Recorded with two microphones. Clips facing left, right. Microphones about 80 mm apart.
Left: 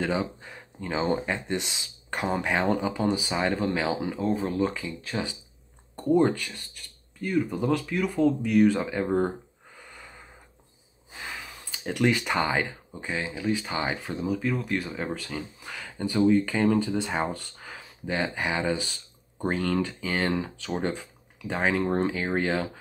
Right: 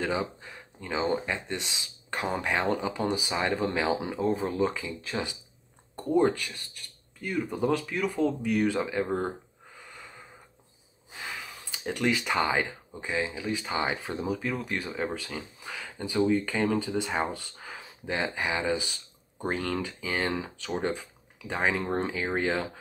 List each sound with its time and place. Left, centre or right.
0.8 s speech: centre
5.0 s speech: centre
8.0 s speech: centre
8.5 s speech: centre
8.7 s speech: centre
9.8 s snort: centre
11.1 s a sound: centre
12.1 s speech: centre
13.7 s speech: centre
16.4 s speech: centre
16.7 s speech: centre